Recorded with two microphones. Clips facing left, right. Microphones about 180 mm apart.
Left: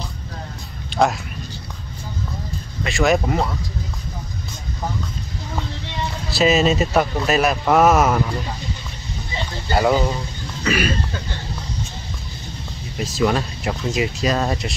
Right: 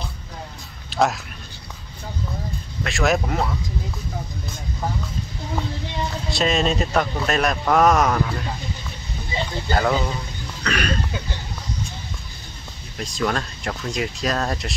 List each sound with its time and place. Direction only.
0.9 s a sound: centre (ahead or behind)
2.8 s speech: centre (ahead or behind)
6.3 s speech: 5° left (ahead or behind)
9.7 s speech: 10° left (ahead or behind)
12.9 s speech: 5° left (ahead or behind)